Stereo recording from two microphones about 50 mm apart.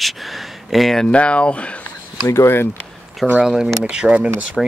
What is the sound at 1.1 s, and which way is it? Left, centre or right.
Speech, left.